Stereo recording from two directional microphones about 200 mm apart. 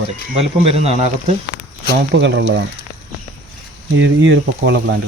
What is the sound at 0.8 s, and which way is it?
Speech, 30° right (ahead or behind).